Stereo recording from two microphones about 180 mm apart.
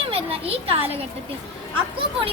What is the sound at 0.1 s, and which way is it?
Speech, 35° right (ahead or behind).